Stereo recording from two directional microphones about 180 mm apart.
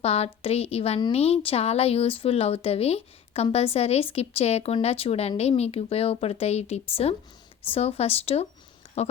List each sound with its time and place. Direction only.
0.0 s a woman's voice: 35° left (ahead or behind)